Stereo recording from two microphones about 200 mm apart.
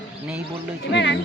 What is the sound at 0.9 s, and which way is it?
Speech, 60° left (ahead or behind).